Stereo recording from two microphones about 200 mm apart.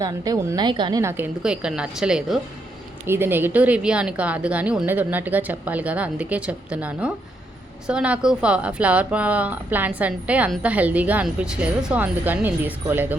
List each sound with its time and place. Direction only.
0.0 s a woman's voice: 15° right (ahead or behind)